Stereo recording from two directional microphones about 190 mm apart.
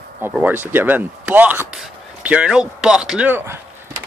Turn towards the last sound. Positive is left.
turn(degrees=-10)  # may be behind; listen again after turning